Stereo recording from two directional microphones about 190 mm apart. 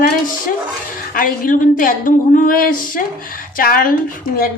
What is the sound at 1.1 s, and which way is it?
A woman's voice, 45° left (ahead or behind).